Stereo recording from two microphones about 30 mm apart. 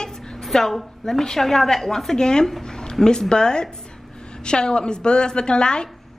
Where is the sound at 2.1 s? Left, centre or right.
Left.